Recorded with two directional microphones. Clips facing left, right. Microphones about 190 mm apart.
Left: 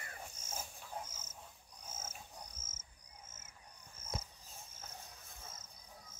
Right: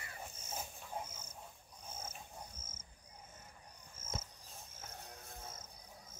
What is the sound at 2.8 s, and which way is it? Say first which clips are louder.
Cricket: right 2 dB; 90° left.